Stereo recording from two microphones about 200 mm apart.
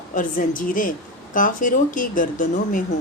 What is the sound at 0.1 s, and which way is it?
A woman's voice, 40° left (ahead or behind).